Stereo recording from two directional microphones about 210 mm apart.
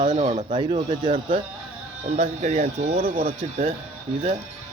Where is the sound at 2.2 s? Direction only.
30° right (ahead or behind).